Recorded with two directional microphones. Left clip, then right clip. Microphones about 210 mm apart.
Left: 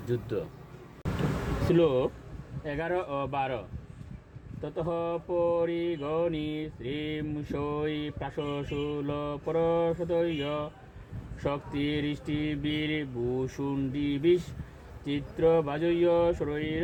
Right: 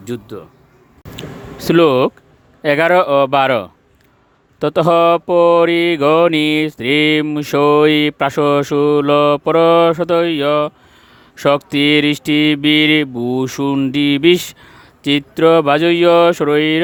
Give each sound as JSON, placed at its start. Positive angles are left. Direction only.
{"t": 1.6, "sound": "mantra", "side_deg": -55}